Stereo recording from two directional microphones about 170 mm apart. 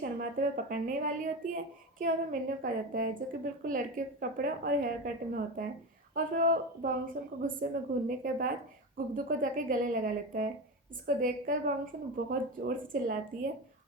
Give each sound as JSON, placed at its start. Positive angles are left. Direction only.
{"t": 0.0, "sound": "a woman's voice", "side_deg": -55}